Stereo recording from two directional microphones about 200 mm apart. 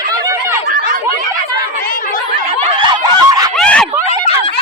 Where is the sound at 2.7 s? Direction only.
20° right (ahead or behind).